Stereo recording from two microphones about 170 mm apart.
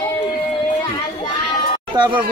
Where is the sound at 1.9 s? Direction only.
25° right (ahead or behind).